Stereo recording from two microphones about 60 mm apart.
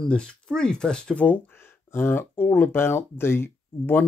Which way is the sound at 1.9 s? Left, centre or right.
Left.